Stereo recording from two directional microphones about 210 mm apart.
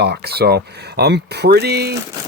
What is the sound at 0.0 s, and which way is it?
Speech, 50° right (ahead or behind).